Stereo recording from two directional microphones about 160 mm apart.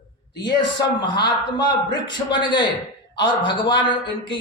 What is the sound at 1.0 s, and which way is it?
A man's voice, 25° left (ahead or behind).